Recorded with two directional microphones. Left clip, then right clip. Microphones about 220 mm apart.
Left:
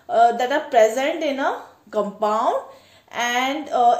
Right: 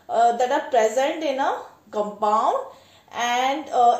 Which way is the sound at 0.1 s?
40° left (ahead or behind).